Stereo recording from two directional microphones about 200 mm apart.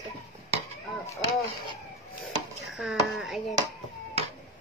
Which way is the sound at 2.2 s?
Centre (ahead or behind).